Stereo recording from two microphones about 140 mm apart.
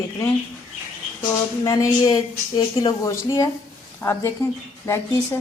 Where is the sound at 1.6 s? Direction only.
25° left (ahead or behind).